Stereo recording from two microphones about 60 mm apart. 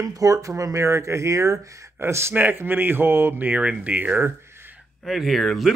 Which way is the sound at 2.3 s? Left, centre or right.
Right.